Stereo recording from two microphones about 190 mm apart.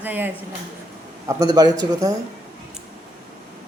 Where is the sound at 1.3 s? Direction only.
20° right (ahead or behind).